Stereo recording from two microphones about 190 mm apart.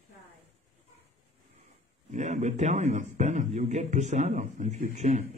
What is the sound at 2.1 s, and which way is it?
A man's voice, 40° right (ahead or behind).